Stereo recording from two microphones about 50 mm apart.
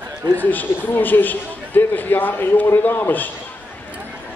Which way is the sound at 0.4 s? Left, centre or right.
Left.